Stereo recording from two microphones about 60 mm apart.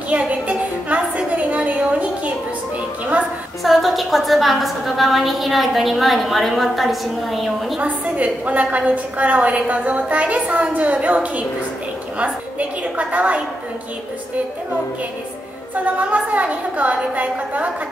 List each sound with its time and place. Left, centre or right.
0.1 s a sound: right
3.6 s a woman's voice: centre
7.8 s a woman's voice: right
15.7 s a woman's voice: right